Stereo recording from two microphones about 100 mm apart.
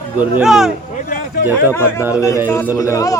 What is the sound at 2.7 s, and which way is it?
Speech, 35° left (ahead or behind).